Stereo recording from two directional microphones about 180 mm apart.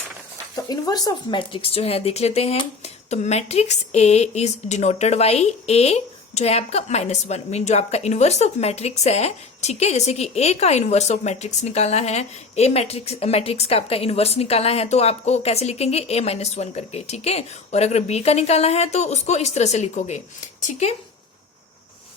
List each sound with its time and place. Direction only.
0.5 s speech: 20° left (ahead or behind); by 20.9 s 40° left (ahead or behind)